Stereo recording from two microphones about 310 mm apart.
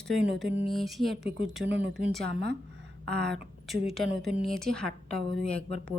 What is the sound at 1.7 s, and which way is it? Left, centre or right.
Speech, right.